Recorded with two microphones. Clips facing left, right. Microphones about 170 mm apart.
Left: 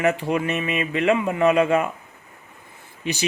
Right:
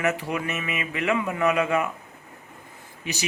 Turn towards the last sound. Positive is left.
turn(degrees=30)  # may be behind; listen again after turning